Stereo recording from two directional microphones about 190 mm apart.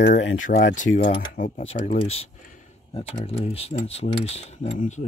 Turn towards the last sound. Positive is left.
turn(degrees=40)  # may be behind; listen again after turning